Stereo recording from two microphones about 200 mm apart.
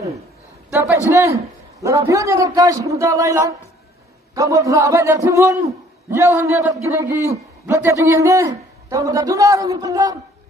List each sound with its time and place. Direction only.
0.7 s a man's voice: 10° right (ahead or behind)